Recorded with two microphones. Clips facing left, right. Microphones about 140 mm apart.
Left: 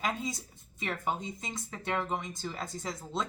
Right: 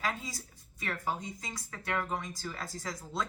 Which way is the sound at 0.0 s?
20° left (ahead or behind).